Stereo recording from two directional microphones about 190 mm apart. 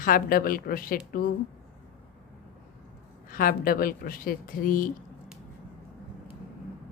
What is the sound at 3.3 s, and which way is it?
A woman's voice, 50° left (ahead or behind).